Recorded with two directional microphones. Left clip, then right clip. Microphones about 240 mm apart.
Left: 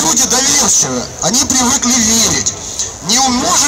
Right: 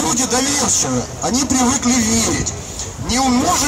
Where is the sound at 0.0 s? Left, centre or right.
Left.